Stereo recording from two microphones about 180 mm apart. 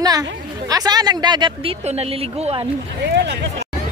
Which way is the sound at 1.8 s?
35° right (ahead or behind).